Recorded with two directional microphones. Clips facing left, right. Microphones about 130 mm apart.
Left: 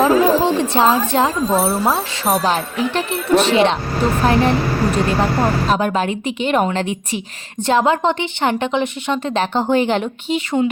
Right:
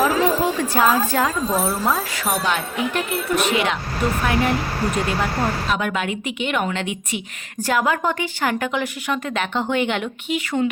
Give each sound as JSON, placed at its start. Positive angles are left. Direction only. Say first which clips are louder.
{"t": 0.0, "sound": "a woman's voice", "louder": "left 5 dB", "side_deg": 25}